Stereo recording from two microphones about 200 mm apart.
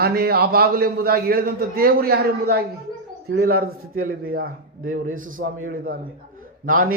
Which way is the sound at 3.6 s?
90° right.